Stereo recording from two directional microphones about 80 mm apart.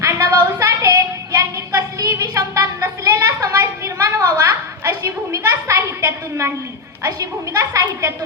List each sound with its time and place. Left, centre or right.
0.0 s child singing: right
2.3 s a sound: right
7.0 s a woman's voice: right